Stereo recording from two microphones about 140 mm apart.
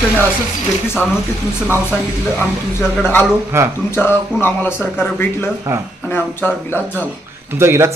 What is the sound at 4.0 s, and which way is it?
Speech, 15° left (ahead or behind).